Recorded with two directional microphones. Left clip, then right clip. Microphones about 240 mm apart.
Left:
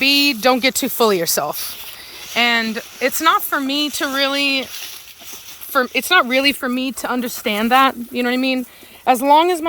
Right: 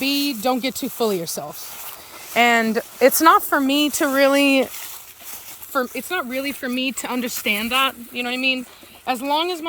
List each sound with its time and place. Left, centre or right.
0.0 s speech: centre
2.3 s speech: centre
5.7 s speech: centre
6.1 s speech: left
6.7 s speech: centre
7.9 s speech: left